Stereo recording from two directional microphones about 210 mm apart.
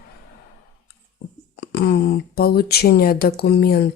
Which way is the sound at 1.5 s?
50° left (ahead or behind).